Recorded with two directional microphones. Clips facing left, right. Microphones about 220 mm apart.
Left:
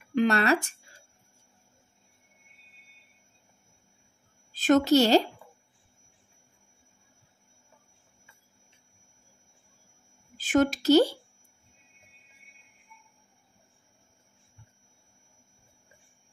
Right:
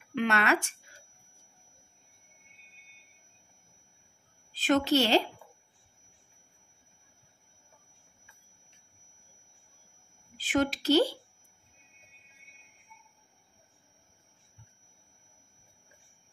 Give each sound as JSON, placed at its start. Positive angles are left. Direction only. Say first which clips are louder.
{"t": 0.1, "sound": "speech", "louder": "left 4 dB", "side_deg": 35}
{"t": 4.6, "sound": "a woman's voice", "louder": "left 5 dB", "side_deg": 45}
{"t": 10.3, "sound": "speech", "louder": "left 5 dB", "side_deg": 45}